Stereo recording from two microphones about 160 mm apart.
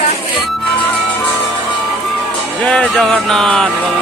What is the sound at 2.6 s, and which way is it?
Music, 5° left (ahead or behind).